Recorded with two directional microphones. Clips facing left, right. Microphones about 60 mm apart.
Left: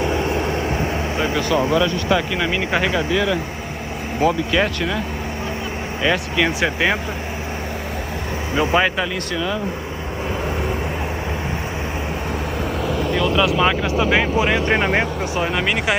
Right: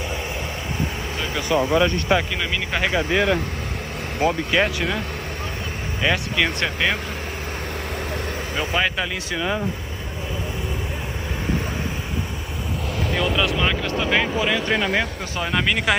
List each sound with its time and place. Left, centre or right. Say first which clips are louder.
1.5 s speech: right 1 dB; right
2.3 s speech: left 5 dB; centre
4.2 s speech: left 2 dB; centre
6.0 s speech: left 2 dB; centre
8.5 s speech: left 6 dB; centre
13.1 s speech: left 3 dB; centre
13.6 s speech: left 5 dB; centre
14.4 s speech: left 3 dB; left
15.3 s speech: even; centre